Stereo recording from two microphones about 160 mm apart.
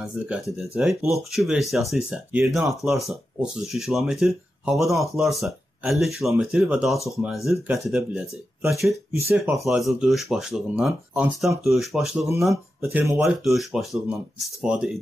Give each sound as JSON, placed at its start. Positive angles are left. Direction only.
{"t": 0.0, "sound": "speech", "side_deg": -5}
{"t": 12.9, "sound": "speech", "side_deg": -15}
{"t": 13.2, "sound": "speech", "side_deg": 0}